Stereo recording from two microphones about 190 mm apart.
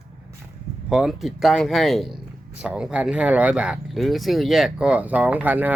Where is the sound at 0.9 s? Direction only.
Centre (ahead or behind).